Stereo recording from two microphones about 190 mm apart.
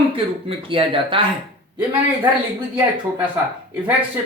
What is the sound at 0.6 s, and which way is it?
Speech, 25° right (ahead or behind).